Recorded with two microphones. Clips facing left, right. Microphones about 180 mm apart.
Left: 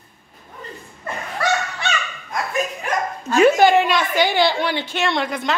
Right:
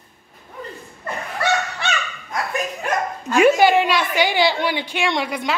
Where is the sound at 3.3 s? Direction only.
10° right (ahead or behind).